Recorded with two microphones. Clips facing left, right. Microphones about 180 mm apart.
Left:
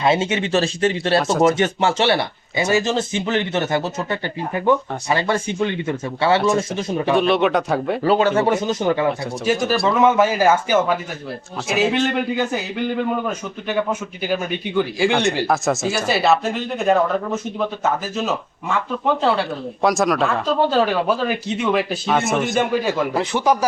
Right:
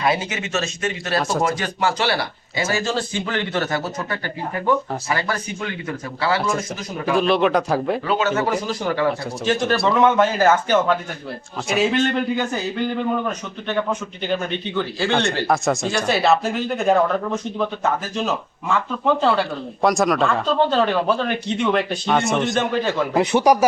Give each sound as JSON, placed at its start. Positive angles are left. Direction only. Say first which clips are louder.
{"t": 0.0, "sound": "speech", "louder": "left 4 dB", "side_deg": 25}
{"t": 7.2, "sound": "speech", "louder": "right 2 dB", "side_deg": 0}
{"t": 8.0, "sound": "speech", "louder": "left 4 dB", "side_deg": 35}
{"t": 9.4, "sound": "speech", "louder": "left 1 dB", "side_deg": 5}
{"t": 13.2, "sound": "speech", "louder": "left 1 dB", "side_deg": 10}
{"t": 15.4, "sound": "speech", "louder": "even", "side_deg": 0}
{"t": 23.1, "sound": "speech", "louder": "right 7 dB", "side_deg": -20}